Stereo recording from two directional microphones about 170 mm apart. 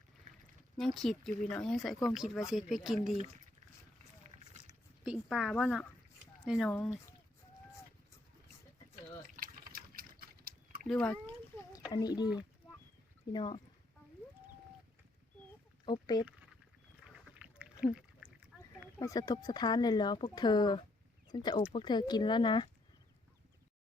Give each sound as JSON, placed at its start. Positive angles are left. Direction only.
{"t": 0.8, "sound": "speech", "side_deg": 0}
{"t": 5.0, "sound": "speech", "side_deg": -5}
{"t": 6.7, "sound": "speech", "side_deg": 5}
{"t": 9.3, "sound": "liquid", "side_deg": -60}
{"t": 10.8, "sound": "speech", "side_deg": 5}
{"t": 11.9, "sound": "speech", "side_deg": 25}
{"t": 15.9, "sound": "speech", "side_deg": 25}
{"t": 17.0, "sound": "rowboat", "side_deg": -5}
{"t": 17.9, "sound": "a sound", "side_deg": -10}
{"t": 18.9, "sound": "speech", "side_deg": 20}